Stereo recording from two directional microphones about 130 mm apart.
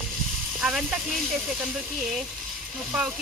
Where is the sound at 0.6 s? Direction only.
5° right (ahead or behind).